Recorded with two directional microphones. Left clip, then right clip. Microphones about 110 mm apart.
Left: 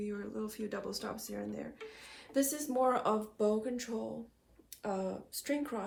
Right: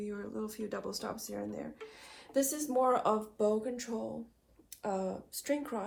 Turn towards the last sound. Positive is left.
turn(degrees=-45)  # may be behind; listen again after turning